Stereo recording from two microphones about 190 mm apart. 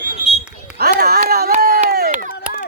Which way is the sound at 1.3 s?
55° right (ahead or behind).